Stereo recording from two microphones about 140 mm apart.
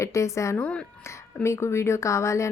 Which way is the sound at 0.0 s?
20° left (ahead or behind).